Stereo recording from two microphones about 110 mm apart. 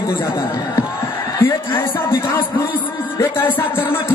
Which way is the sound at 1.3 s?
25° left (ahead or behind).